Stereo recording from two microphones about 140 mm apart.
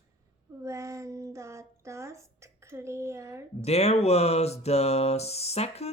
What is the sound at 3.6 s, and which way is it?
Mantra, 50° left (ahead or behind).